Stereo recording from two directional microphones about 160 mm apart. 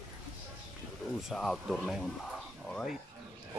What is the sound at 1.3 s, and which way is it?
Speech, centre (ahead or behind).